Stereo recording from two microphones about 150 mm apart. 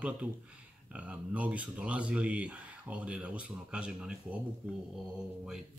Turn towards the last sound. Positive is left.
turn(degrees=-5)  # may be behind; listen again after turning